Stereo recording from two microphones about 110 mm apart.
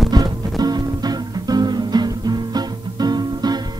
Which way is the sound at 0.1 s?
40° right (ahead or behind).